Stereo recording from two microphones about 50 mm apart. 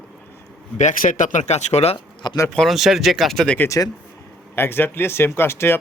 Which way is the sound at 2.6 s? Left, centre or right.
Centre.